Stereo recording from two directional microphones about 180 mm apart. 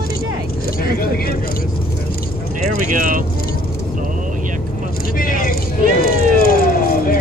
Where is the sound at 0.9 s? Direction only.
55° left (ahead or behind).